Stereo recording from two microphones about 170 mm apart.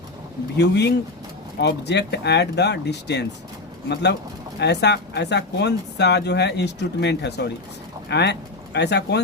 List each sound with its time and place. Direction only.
0.5 s speech: 85° left
4.6 s speech: 80° left